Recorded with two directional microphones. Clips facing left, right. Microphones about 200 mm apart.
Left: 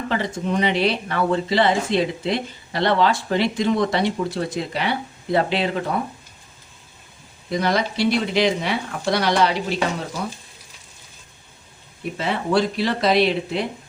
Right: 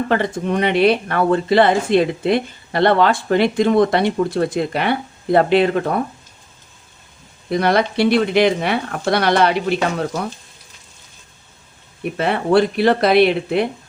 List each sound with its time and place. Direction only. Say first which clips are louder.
0.1 s speech: right 4 dB; 55° right (ahead or behind)
7.5 s speech: right 5 dB; 60° right (ahead or behind)
12.1 s speech: right 5 dB; 60° right (ahead or behind)